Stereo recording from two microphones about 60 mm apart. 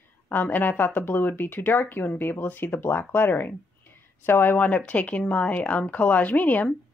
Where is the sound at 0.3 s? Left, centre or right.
Left.